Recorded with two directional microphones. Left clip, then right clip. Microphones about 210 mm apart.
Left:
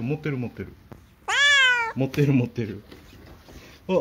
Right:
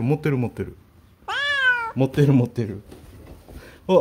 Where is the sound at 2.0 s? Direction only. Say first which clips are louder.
Right 4 dB; 20° right (ahead or behind).